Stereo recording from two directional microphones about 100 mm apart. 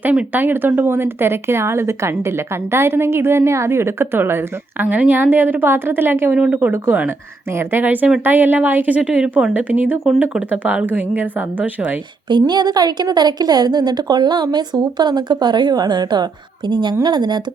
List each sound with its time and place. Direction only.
0.0 s a woman's voice: 15° right (ahead or behind)
12.3 s a woman's voice: 45° right (ahead or behind)